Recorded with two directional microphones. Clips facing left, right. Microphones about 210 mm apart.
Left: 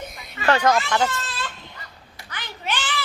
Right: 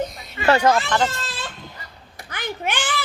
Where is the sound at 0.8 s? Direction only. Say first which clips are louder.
Right 1 dB; 5° left (ahead or behind).